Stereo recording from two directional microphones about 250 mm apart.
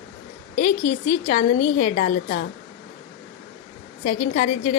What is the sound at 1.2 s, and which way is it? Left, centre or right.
A woman's voice, left.